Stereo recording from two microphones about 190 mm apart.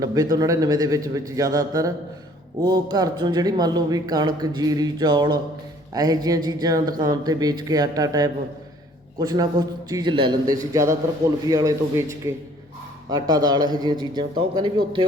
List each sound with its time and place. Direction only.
0.0 s a man's voice: 20° right (ahead or behind)
13.1 s a man's voice: 20° right (ahead or behind)